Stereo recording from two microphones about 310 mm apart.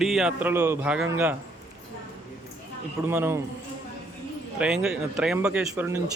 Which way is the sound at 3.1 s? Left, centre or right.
Centre.